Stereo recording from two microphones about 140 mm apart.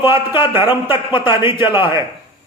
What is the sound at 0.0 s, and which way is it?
A man's voice, 15° right (ahead or behind).